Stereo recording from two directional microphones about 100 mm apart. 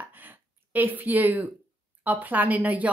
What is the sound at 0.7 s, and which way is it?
A woman's voice, 20° right (ahead or behind).